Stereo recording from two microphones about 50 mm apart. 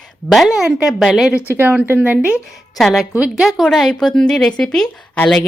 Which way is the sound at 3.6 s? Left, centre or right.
Centre.